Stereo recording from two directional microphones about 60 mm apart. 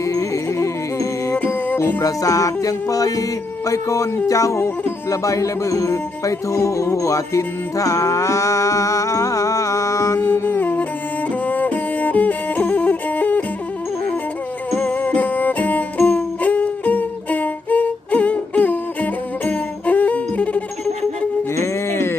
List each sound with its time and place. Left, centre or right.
0.0 s music: left
3.7 s speech: left
5.0 s music: left
10.3 s music: left
14.8 s music: left
21.5 s music: left